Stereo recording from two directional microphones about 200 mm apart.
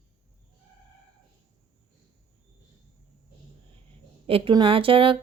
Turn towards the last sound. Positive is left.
turn(degrees=-25)  # may be behind; listen again after turning